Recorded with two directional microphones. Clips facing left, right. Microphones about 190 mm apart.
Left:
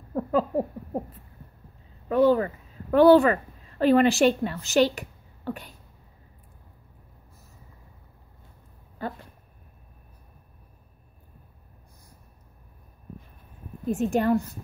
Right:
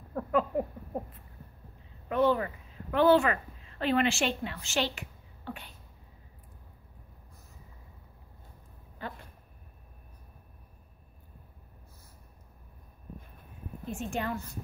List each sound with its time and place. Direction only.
0.1 s a sound: 35° left (ahead or behind)
2.0 s a woman's voice: 35° left (ahead or behind)
13.8 s a woman's voice: 40° left (ahead or behind)